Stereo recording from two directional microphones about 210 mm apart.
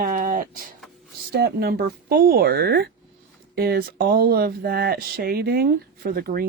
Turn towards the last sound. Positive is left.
turn(degrees=-45)  # may be behind; listen again after turning